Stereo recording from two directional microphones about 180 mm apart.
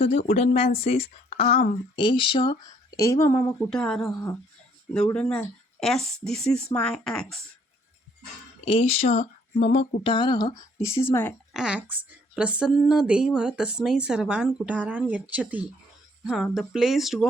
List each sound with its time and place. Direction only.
0.0 s speech: 35° left (ahead or behind)
2.9 s speech: 15° left (ahead or behind)
3.7 s speech: 5° left (ahead or behind)
8.6 s speech: 30° left (ahead or behind); by 11.3 s 10° left (ahead or behind)
11.5 s speech: 5° right (ahead or behind)